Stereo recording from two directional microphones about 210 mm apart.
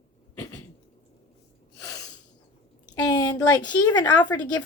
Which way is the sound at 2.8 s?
20° left (ahead or behind).